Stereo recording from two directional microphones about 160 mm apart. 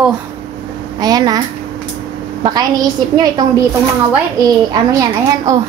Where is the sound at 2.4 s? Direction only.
25° right (ahead or behind).